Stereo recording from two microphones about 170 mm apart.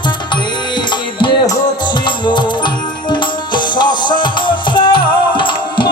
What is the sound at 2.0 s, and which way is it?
Music, 25° left (ahead or behind).